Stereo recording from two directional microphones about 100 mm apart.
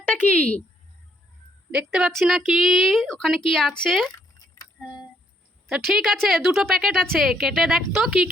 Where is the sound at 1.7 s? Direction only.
10° right (ahead or behind).